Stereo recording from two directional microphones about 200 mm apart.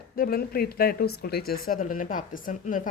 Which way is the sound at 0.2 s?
50° left (ahead or behind).